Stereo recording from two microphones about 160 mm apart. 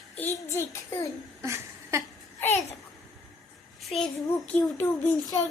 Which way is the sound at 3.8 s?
5° left (ahead or behind).